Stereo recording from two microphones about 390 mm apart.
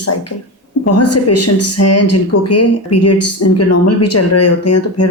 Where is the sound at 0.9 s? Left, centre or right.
Left.